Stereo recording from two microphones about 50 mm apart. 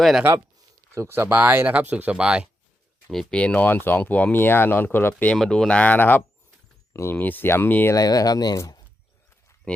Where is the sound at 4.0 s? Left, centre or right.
Left.